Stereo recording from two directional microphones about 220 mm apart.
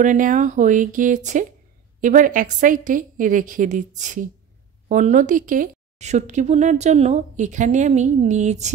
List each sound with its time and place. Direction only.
0.0 s a woman's voice: 35° right (ahead or behind)